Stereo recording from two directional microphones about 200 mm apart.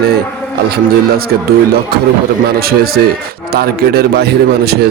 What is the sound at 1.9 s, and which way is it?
Speech, 50° right (ahead or behind).